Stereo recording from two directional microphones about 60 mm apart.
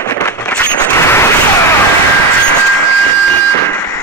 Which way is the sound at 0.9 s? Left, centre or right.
Left.